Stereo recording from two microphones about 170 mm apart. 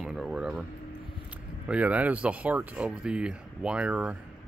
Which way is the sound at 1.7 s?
10° right (ahead or behind).